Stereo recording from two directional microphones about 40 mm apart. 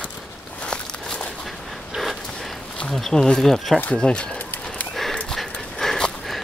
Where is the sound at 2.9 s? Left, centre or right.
Centre.